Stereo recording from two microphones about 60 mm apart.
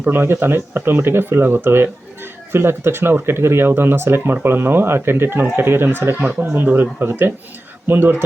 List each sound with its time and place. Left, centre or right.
0.0 s speech: right